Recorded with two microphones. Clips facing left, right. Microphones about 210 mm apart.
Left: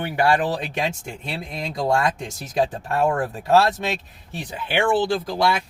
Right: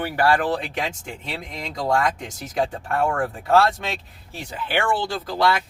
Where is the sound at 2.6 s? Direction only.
20° left (ahead or behind).